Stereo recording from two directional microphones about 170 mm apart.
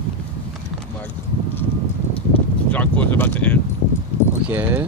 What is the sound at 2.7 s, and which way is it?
Speech, 10° left (ahead or behind).